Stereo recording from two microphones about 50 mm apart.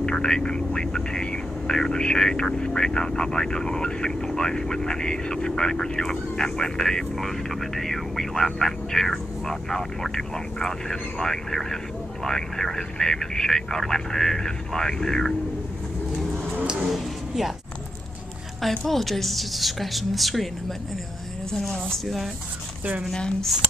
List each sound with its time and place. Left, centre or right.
0.0 s speech: centre
16.6 s a sound: centre
18.6 s a woman's voice: centre
21.5 s speech: centre